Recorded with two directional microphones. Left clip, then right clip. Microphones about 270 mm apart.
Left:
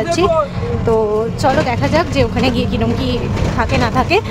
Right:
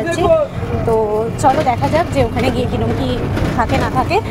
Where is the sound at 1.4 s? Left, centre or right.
Centre.